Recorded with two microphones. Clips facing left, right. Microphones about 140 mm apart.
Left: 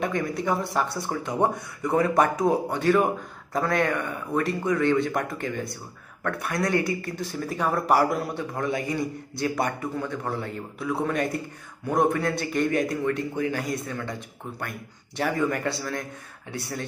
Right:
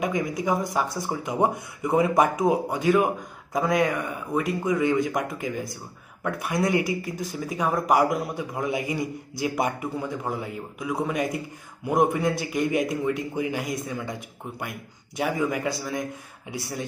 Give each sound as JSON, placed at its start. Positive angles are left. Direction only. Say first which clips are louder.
{"t": 0.0, "sound": "a man's voice", "louder": "right 1 dB", "side_deg": -15}
{"t": 0.7, "sound": "speech", "louder": "even", "side_deg": -5}
{"t": 1.1, "sound": "a man's voice", "louder": "right 1 dB", "side_deg": -15}
{"t": 2.4, "sound": "a man's voice", "louder": "even", "side_deg": -5}
{"t": 6.2, "sound": "speech", "louder": "right 2 dB", "side_deg": -20}
{"t": 7.2, "sound": "speech", "louder": "even", "side_deg": -5}
{"t": 8.5, "sound": "a man's voice", "louder": "even", "side_deg": -15}